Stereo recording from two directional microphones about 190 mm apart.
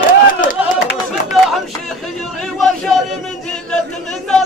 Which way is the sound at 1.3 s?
Centre (ahead or behind).